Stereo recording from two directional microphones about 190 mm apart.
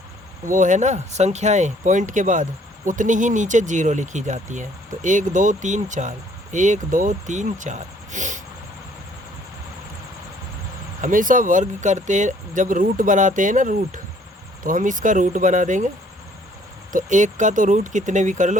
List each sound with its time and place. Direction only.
0.4 s speech: 40° right (ahead or behind)
11.0 s speech: 45° right (ahead or behind)
16.9 s speech: 40° right (ahead or behind)